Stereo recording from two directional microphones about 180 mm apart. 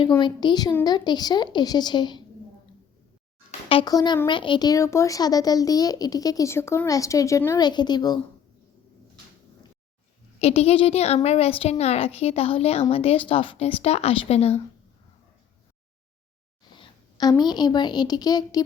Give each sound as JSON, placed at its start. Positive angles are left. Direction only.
{"t": 0.2, "sound": "speech", "side_deg": 25}
{"t": 3.7, "sound": "speech", "side_deg": 25}
{"t": 10.4, "sound": "a woman's voice", "side_deg": 35}
{"t": 16.7, "sound": "a woman's voice", "side_deg": 25}